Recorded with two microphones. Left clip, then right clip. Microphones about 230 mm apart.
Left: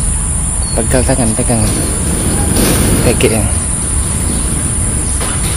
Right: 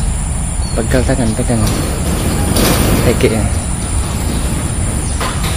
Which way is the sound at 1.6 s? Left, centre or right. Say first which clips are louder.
Even; right.